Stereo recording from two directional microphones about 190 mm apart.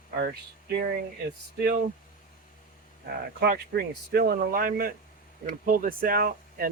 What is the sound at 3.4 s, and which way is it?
Speech, 55° right (ahead or behind).